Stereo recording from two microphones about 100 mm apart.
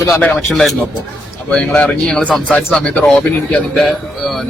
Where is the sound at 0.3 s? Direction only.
5° left (ahead or behind).